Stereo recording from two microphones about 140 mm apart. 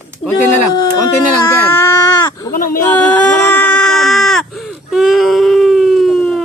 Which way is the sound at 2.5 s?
80° left.